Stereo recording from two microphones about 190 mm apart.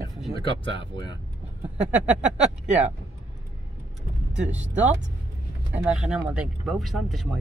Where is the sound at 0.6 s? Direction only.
25° left (ahead or behind).